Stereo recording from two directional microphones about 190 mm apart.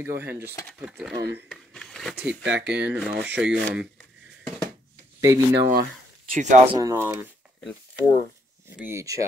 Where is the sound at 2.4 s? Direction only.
5° right (ahead or behind).